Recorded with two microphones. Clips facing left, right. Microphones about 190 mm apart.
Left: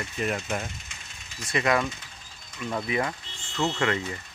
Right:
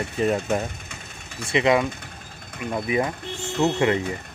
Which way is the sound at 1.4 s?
20° right (ahead or behind).